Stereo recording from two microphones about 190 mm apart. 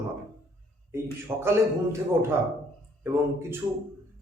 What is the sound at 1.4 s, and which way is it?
Speech, 15° right (ahead or behind).